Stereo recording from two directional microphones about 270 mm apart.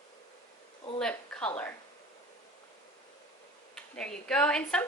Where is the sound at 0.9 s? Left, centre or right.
Centre.